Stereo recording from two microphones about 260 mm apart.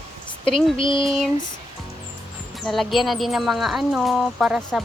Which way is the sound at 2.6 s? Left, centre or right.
Centre.